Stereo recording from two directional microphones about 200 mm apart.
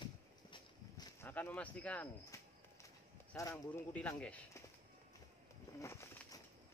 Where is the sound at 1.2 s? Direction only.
10° left (ahead or behind).